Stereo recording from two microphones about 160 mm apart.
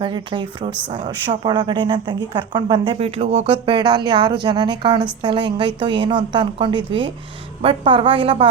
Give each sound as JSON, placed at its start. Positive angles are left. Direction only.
{"t": 0.0, "sound": "a woman's voice", "side_deg": -30}